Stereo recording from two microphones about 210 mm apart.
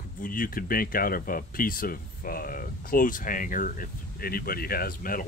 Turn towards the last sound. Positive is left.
turn(degrees=40)  # may be behind; listen again after turning